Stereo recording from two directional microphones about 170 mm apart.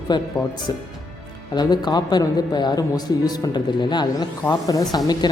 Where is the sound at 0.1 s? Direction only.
25° left (ahead or behind).